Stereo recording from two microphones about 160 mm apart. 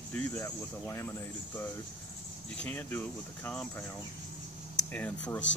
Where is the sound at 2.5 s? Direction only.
10° left (ahead or behind).